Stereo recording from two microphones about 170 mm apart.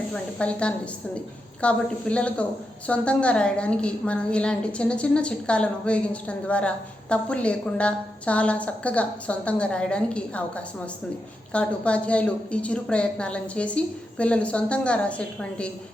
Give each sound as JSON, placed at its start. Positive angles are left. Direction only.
{"t": 0.1, "sound": "a woman's voice", "side_deg": 5}